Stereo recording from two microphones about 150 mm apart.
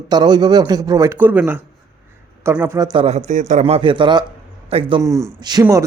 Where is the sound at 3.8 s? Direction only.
35° right (ahead or behind).